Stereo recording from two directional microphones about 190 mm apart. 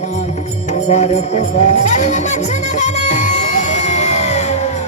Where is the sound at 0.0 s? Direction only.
35° left (ahead or behind).